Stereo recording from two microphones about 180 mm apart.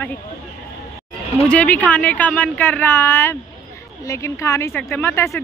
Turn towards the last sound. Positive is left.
turn(degrees=15)  # may be behind; listen again after turning